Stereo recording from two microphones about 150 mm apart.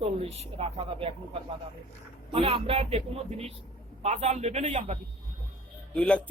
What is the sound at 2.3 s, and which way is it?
Speech, 35° right (ahead or behind).